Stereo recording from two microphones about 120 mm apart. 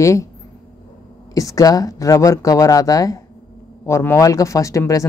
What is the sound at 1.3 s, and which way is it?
Speech, 30° left (ahead or behind).